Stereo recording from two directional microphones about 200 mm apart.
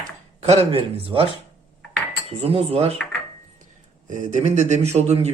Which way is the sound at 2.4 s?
30° right (ahead or behind).